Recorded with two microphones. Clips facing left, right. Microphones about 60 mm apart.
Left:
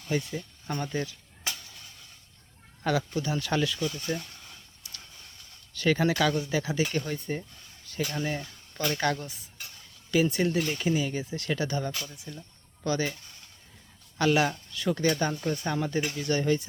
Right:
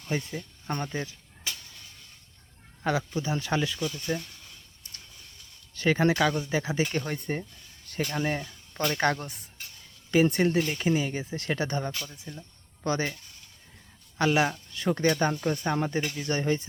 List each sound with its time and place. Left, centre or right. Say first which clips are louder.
0.1 s speech: left 1 dB; right
2.8 s speech: even; right
5.7 s speech: right 1 dB; right
10.6 s speech: right 1 dB; right
14.2 s speech: even; right